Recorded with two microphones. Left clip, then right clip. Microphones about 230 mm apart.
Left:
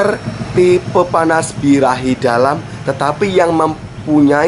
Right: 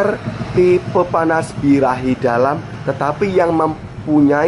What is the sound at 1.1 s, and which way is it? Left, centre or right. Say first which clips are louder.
Speech: left 3 dB; centre.